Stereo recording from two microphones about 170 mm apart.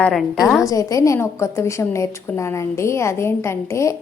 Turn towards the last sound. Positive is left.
turn(degrees=15)  # may be behind; listen again after turning